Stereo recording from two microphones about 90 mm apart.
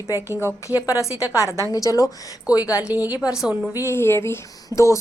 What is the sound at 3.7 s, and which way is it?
Speech, 30° left (ahead or behind).